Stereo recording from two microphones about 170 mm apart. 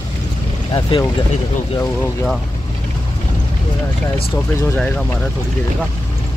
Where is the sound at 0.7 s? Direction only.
25° left (ahead or behind).